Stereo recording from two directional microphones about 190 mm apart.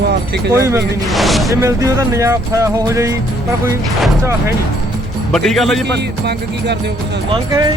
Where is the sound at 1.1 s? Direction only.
Centre (ahead or behind).